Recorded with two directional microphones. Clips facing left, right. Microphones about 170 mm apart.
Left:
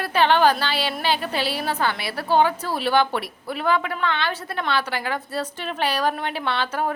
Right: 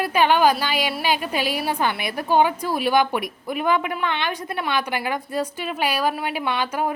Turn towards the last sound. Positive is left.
turn(degrees=-10)  # may be behind; listen again after turning